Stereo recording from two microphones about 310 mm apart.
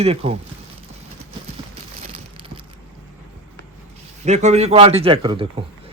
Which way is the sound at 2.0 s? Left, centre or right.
Centre.